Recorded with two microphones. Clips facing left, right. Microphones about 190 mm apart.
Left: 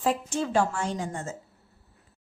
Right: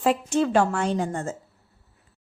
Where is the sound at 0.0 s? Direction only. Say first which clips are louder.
Right 5 dB; 70° right (ahead or behind).